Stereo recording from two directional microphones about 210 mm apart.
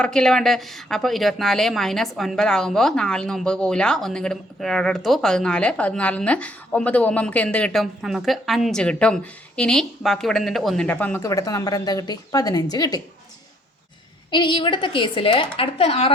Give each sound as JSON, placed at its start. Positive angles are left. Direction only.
{"t": 0.0, "sound": "a woman's voice", "side_deg": 5}
{"t": 14.3, "sound": "a woman's voice", "side_deg": 20}